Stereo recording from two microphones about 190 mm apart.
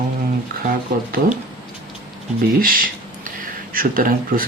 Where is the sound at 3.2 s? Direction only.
45° right (ahead or behind).